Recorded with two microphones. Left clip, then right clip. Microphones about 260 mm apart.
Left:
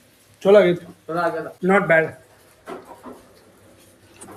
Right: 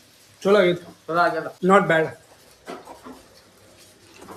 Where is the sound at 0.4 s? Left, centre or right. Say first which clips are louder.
Left 4 dB; centre.